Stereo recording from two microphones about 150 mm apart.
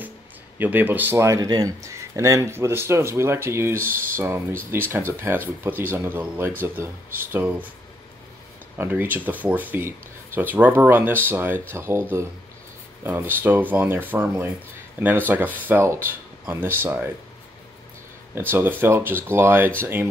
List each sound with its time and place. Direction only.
0.6 s speech: 10° right (ahead or behind)
8.7 s speech: 15° right (ahead or behind)
18.3 s speech: 15° right (ahead or behind)